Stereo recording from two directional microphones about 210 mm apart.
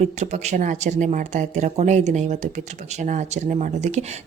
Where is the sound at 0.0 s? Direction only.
35° right (ahead or behind).